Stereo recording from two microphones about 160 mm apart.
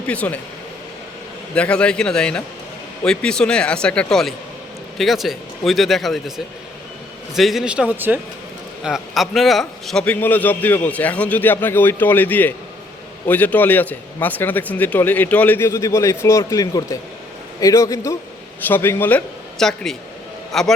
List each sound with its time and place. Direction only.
0.1 s a man's voice: 10° left (ahead or behind)
1.5 s a man's voice: 5° left (ahead or behind)